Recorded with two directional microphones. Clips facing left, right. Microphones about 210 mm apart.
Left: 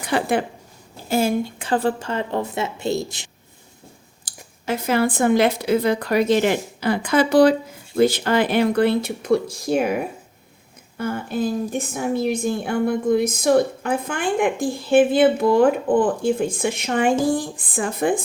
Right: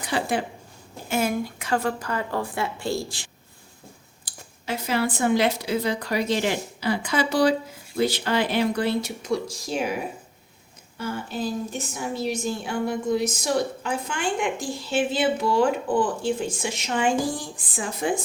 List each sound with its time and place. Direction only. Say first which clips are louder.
0.0 s a woman's voice: left 5 dB; 55° left (ahead or behind)
1.0 s a woman's voice: left 5 dB; 30° left (ahead or behind)
4.3 s a woman's voice: left 5 dB; 50° left (ahead or behind)
10.9 s a woman's voice: left 5 dB; 55° left (ahead or behind)